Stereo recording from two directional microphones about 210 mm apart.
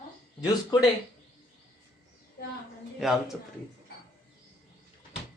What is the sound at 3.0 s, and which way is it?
Speech, centre (ahead or behind).